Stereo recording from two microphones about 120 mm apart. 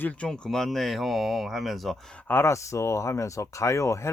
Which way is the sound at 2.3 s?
20° left (ahead or behind).